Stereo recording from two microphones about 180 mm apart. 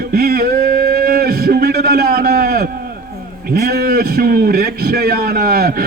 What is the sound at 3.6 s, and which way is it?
Speech, 55° right (ahead or behind).